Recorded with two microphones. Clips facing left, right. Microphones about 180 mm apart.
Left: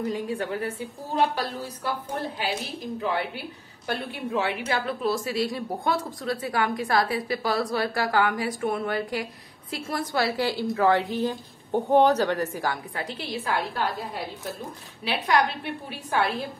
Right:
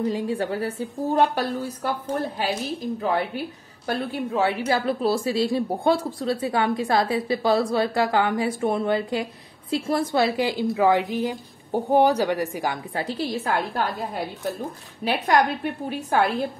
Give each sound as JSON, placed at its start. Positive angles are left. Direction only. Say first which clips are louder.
{"t": 0.1, "sound": "a woman's voice", "louder": "right 3 dB", "side_deg": -30}
{"t": 3.0, "sound": "a woman's voice", "louder": "right 3 dB", "side_deg": -40}
{"t": 12.9, "sound": "a woman's voice", "louder": "right 5 dB", "side_deg": -35}
{"t": 15.0, "sound": "a woman's voice", "louder": "right 3 dB", "side_deg": -45}